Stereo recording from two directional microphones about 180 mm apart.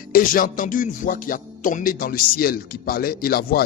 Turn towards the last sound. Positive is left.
turn(degrees=55)  # may be behind; listen again after turning